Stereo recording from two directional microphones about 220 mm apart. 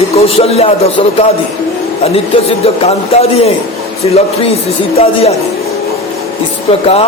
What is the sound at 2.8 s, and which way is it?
A man's voice, 30° left (ahead or behind).